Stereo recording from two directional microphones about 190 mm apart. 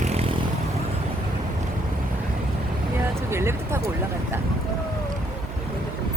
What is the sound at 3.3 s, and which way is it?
Music, 15° right (ahead or behind).